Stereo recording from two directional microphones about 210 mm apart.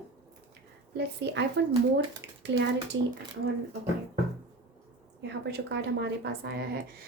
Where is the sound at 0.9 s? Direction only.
55° right (ahead or behind).